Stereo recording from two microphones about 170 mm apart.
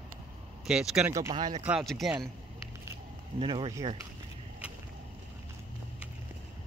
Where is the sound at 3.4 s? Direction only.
30° right (ahead or behind).